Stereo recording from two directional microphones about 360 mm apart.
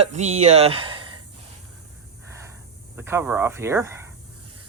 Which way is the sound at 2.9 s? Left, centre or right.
Centre.